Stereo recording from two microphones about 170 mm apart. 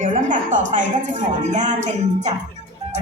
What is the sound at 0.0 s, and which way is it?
A woman's voice, 50° right (ahead or behind).